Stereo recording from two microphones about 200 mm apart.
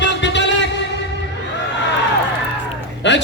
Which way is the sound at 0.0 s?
65° left (ahead or behind).